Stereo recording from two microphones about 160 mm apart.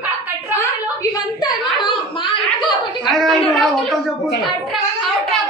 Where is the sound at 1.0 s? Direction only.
25° left (ahead or behind).